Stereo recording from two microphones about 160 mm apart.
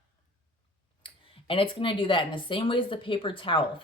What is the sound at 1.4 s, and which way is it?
Speech, 35° left (ahead or behind).